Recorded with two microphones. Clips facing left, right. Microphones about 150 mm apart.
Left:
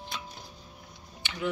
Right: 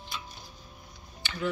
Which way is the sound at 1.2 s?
15° left (ahead or behind).